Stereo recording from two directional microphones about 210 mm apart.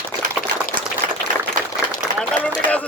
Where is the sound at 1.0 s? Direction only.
45° right (ahead or behind).